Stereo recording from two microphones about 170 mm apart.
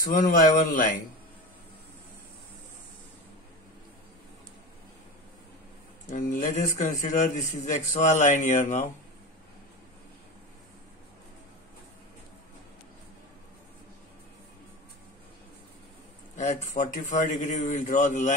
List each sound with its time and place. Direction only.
0.2 s a man's voice: 55° left (ahead or behind)
6.0 s a man's voice: 50° left (ahead or behind)
16.3 s a man's voice: 45° left (ahead or behind)